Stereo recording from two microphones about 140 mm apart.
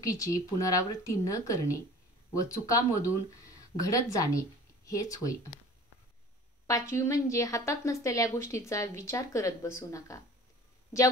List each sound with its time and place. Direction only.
0.0 s a woman's voice: 25° left (ahead or behind)
6.7 s a woman's voice: 20° left (ahead or behind)